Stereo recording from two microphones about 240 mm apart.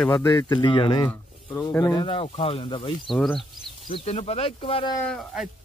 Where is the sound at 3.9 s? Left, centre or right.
Left.